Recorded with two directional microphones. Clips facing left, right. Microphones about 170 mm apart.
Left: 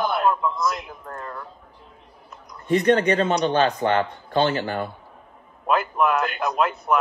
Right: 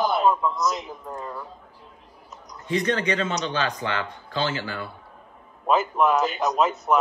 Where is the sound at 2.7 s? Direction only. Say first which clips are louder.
Left 6 dB; 55° left (ahead or behind).